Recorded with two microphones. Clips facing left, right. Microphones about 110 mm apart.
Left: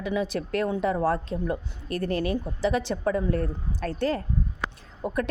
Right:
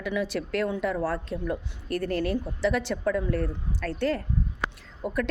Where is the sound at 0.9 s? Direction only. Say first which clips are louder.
Left 4 dB; 35° left (ahead or behind).